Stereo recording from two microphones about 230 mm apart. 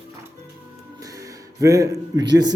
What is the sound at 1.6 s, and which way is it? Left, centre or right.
Speech, centre.